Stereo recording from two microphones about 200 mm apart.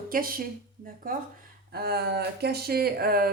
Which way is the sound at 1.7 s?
50° right (ahead or behind).